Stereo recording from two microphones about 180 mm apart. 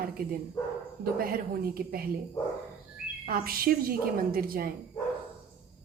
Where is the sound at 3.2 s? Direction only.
55° right (ahead or behind).